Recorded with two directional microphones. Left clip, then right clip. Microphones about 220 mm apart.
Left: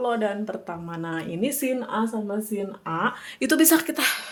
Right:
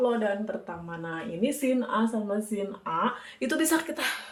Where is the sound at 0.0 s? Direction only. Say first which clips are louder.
Left 1 dB; 50° left (ahead or behind).